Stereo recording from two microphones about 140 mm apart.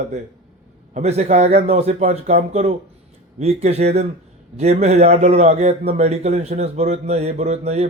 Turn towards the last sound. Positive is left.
turn(degrees=-50)  # may be behind; listen again after turning